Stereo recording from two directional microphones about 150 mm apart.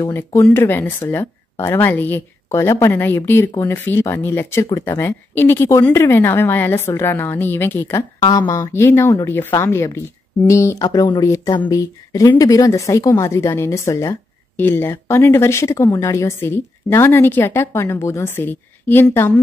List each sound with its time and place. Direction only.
0.0 s speech: 20° left (ahead or behind)
8.2 s a woman's voice: 25° left (ahead or behind)